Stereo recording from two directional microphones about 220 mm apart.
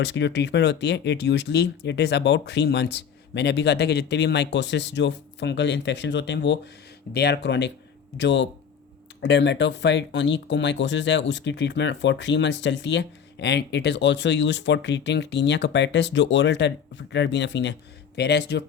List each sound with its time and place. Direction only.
0.0 s speech: 55° left (ahead or behind)